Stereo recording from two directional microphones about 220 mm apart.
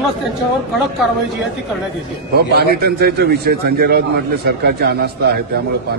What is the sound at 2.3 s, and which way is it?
A man's voice, 45° right (ahead or behind).